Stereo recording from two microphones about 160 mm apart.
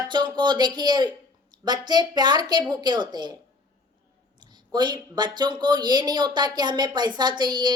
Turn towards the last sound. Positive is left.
turn(degrees=-25)  # may be behind; listen again after turning